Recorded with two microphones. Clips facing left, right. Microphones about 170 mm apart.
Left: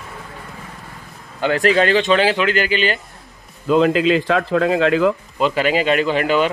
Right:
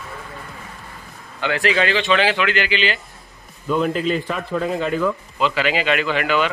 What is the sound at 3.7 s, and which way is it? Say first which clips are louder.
Speech: left 5 dB; 90° left.